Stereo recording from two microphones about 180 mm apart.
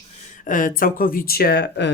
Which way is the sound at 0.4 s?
50° left (ahead or behind).